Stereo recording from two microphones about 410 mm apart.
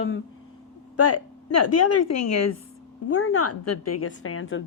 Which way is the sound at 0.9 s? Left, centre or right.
Left.